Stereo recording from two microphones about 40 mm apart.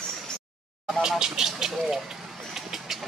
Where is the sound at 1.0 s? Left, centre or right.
Centre.